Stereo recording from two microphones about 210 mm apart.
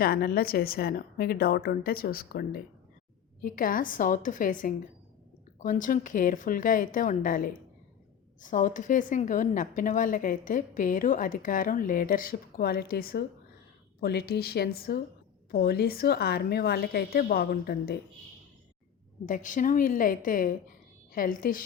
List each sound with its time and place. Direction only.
0.0 s speech: 45° left (ahead or behind)
19.2 s speech: 40° left (ahead or behind)